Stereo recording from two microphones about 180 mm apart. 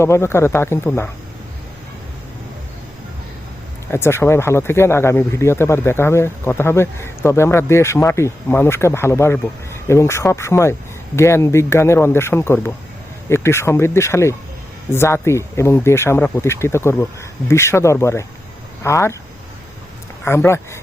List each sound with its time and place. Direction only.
0.0 s speech: 15° left (ahead or behind)
3.9 s speech: 15° left (ahead or behind)
20.2 s speech: 15° left (ahead or behind)